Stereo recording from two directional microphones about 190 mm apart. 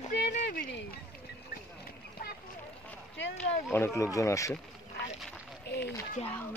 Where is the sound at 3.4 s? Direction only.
10° left (ahead or behind).